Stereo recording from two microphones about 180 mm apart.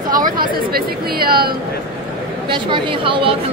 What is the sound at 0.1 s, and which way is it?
Speech, 55° right (ahead or behind).